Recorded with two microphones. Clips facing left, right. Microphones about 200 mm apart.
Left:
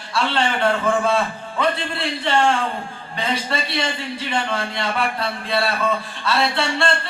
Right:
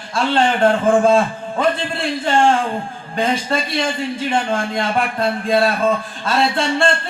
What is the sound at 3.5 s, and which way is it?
Speech, 45° right (ahead or behind).